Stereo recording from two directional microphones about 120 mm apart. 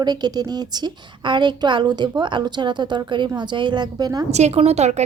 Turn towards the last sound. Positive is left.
turn(degrees=-65)  # may be behind; listen again after turning